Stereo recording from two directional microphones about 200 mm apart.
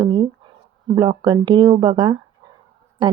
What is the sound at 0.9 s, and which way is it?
Speech, 25° right (ahead or behind).